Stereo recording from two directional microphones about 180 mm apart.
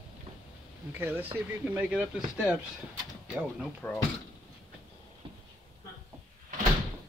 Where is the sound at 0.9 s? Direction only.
10° right (ahead or behind).